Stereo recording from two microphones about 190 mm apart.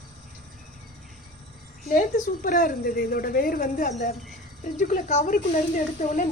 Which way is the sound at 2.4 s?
50° left (ahead or behind).